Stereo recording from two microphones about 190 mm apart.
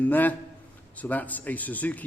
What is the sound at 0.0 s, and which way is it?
A man's voice, 10° left (ahead or behind).